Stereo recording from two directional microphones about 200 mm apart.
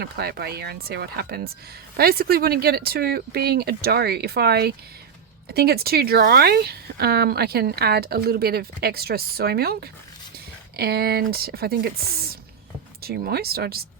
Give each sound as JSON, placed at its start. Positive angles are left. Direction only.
{"t": 0.0, "sound": "a woman's voice", "side_deg": -50}